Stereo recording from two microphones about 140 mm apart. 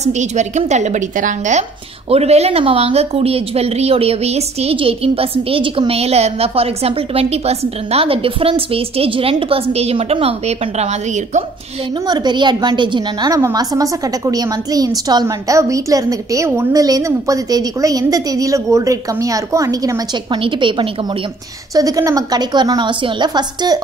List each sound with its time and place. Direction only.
0.0 s a woman's voice: 55° right (ahead or behind)
12.1 s a woman's voice: 30° right (ahead or behind)